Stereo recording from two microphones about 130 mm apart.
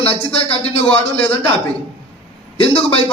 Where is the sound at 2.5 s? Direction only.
45° left (ahead or behind).